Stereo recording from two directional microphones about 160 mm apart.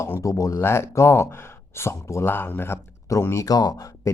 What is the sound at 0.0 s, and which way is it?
Speech, 20° left (ahead or behind).